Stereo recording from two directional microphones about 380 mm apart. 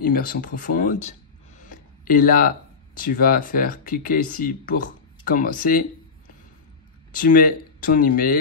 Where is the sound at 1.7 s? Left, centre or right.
Left.